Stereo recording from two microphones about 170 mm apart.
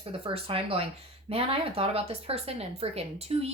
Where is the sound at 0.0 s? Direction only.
35° right (ahead or behind).